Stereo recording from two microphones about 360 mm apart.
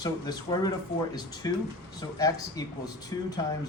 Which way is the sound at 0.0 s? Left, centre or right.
Centre.